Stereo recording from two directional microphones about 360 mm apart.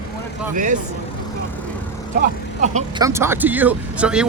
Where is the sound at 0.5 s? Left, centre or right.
Right.